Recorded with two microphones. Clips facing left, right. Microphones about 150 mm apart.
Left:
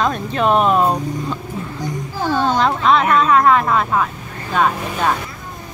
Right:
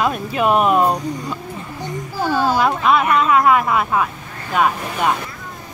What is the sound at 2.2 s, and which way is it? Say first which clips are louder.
Speech: even; 5° right (ahead or behind).